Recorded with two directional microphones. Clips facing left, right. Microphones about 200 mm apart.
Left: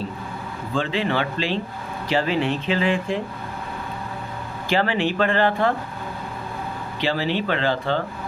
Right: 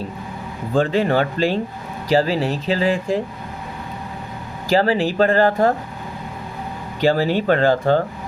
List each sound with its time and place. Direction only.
0.7 s speech: 45° right (ahead or behind)
4.7 s speech: 40° right (ahead or behind)
7.0 s speech: 45° right (ahead or behind)